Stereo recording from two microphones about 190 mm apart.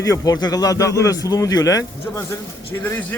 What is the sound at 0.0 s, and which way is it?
Speech, 20° left (ahead or behind).